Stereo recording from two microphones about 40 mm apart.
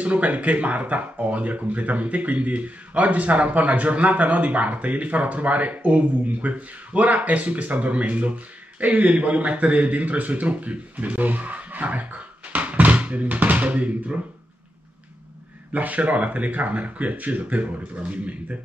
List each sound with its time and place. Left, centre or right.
0.0 s speech: right
15.7 s speech: right